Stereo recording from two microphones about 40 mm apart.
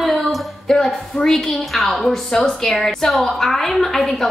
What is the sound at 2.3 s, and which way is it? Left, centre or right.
A woman's voice, left.